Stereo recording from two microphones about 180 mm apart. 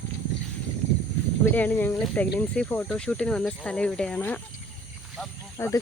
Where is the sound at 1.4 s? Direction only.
10° left (ahead or behind).